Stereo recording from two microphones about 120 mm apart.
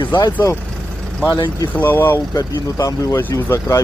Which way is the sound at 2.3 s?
30° left (ahead or behind).